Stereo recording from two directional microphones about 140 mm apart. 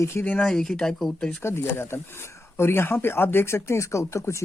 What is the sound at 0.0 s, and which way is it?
Speech, 20° left (ahead or behind).